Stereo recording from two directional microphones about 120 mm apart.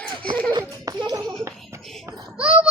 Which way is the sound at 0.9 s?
30° right (ahead or behind).